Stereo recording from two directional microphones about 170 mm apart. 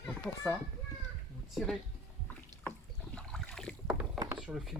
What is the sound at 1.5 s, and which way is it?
Speech, centre (ahead or behind).